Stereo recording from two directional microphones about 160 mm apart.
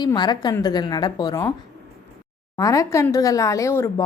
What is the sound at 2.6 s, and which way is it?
A woman's voice, 20° left (ahead or behind).